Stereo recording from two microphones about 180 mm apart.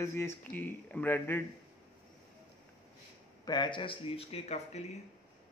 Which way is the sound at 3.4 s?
25° left (ahead or behind).